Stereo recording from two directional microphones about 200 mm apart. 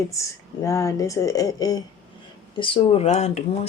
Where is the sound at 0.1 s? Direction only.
15° left (ahead or behind).